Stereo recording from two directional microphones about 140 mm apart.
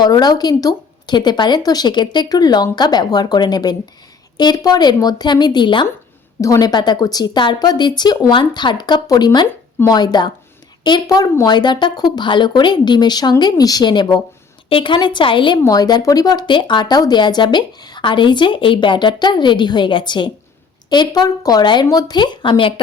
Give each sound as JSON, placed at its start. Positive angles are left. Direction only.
{"t": 0.0, "sound": "speech", "side_deg": 30}